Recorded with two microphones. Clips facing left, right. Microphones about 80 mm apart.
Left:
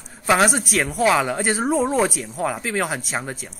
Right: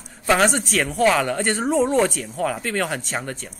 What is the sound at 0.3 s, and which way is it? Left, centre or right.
Speech, centre.